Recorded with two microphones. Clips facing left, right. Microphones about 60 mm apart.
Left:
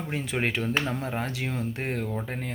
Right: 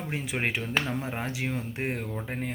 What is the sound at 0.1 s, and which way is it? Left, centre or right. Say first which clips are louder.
Speech: left 2 dB; centre.